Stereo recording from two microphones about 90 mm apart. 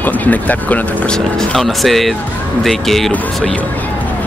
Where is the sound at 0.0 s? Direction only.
20° left (ahead or behind).